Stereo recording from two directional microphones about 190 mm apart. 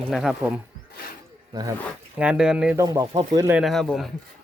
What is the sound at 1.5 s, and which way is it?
Speech, 20° right (ahead or behind).